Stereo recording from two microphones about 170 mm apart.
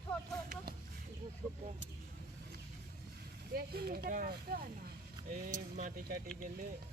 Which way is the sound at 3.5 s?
60° right (ahead or behind).